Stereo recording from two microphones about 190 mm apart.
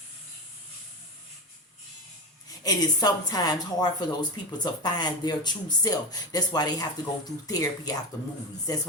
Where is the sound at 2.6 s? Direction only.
20° left (ahead or behind).